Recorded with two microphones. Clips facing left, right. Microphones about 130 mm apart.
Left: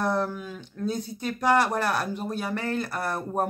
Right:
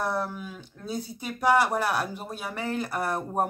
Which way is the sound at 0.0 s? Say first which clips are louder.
Left 3 dB; 5° right (ahead or behind).